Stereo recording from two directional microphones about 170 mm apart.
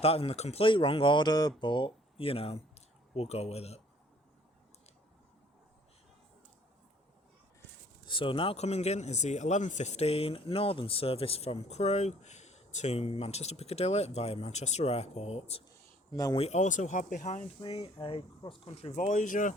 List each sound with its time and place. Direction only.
0.0 s speech: 35° left (ahead or behind)
8.0 s speech: 30° left (ahead or behind)
16.1 s speech: 20° left (ahead or behind)
16.4 s speech: 45° left (ahead or behind)
17.6 s speech: 35° left (ahead or behind); by 19.5 s 50° left (ahead or behind)